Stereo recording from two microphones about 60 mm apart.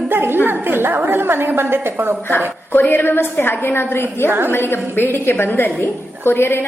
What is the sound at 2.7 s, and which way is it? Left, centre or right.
A woman's voice, left.